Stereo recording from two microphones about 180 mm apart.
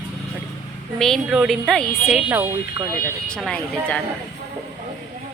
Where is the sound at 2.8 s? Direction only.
25° right (ahead or behind).